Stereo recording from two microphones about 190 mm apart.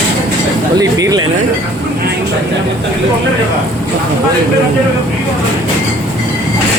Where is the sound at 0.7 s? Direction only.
20° right (ahead or behind).